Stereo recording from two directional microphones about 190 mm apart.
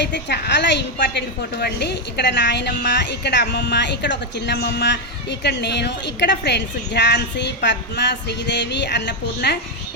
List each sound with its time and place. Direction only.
0.0 s a woman's voice: 65° left (ahead or behind)